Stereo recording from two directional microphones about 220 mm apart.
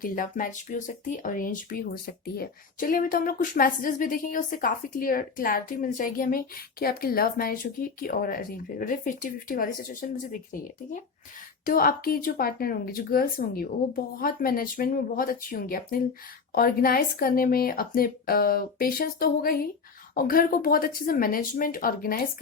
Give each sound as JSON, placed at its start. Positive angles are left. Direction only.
{"t": 0.0, "sound": "speech", "side_deg": 40}